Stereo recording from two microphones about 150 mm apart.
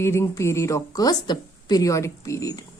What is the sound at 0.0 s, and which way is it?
A woman's voice, 20° left (ahead or behind).